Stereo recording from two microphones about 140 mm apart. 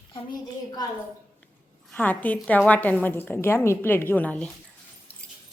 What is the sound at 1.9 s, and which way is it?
A woman's voice, 10° left (ahead or behind).